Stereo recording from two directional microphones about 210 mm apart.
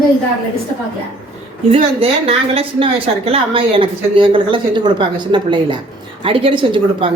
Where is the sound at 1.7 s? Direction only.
25° right (ahead or behind).